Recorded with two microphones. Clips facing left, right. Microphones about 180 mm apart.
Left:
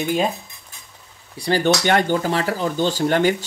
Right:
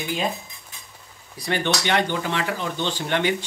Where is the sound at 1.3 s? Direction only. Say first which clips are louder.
Left 6 dB; 30° left (ahead or behind).